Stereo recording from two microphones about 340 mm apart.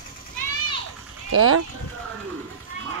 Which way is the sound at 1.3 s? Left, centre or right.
Right.